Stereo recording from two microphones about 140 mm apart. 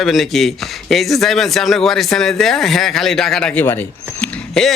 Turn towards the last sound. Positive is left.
turn(degrees=5)  # may be behind; listen again after turning